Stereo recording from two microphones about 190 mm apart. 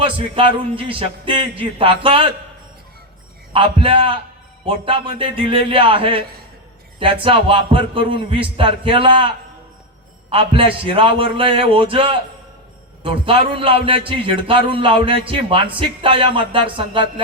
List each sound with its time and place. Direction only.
0.0 s speech: 30° right (ahead or behind)
3.5 s speech: 30° right (ahead or behind)